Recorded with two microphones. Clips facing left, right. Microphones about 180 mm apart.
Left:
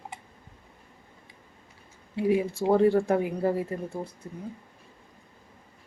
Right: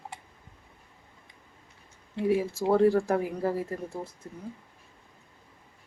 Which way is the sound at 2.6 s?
20° left (ahead or behind).